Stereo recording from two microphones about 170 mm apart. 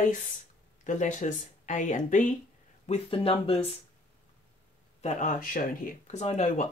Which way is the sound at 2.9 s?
35° left (ahead or behind).